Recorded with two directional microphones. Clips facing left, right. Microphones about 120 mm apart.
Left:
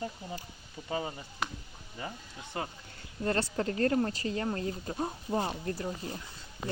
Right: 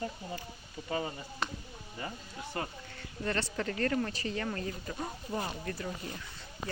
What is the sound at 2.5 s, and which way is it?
Speech, 15° left (ahead or behind).